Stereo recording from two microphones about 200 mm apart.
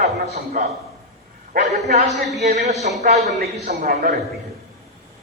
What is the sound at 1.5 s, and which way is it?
Speech, 50° right (ahead or behind).